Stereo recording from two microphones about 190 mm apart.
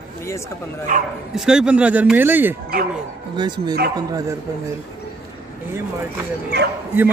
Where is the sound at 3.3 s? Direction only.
25° right (ahead or behind).